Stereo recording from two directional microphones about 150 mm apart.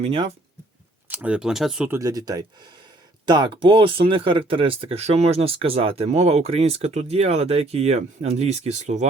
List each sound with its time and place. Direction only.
0.0 s speech: 40° right (ahead or behind)
1.0 s speech: 10° right (ahead or behind)
1.9 s speech: 20° right (ahead or behind); by 9.0 s 50° right (ahead or behind)